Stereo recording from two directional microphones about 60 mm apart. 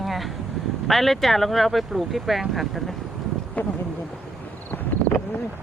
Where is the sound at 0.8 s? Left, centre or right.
Centre.